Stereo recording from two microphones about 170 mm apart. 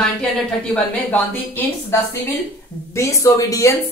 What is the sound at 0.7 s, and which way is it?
Speech, 10° left (ahead or behind).